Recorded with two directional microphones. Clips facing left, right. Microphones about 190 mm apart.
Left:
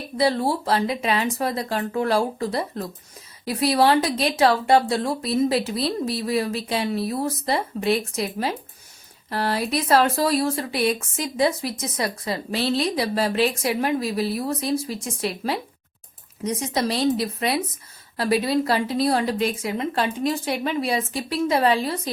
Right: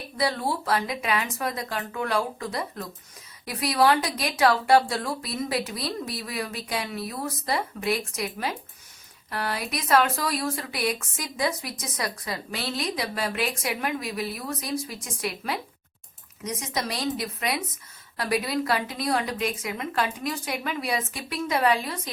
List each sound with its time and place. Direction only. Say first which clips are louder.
0.2 s speech: left 6 dB; 30° left (ahead or behind)